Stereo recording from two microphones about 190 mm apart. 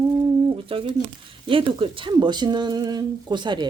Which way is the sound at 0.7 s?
30° right (ahead or behind).